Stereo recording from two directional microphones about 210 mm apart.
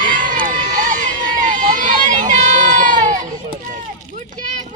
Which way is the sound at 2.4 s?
35° right (ahead or behind).